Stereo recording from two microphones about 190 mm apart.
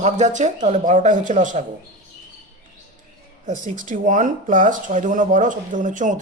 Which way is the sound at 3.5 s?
40° right (ahead or behind).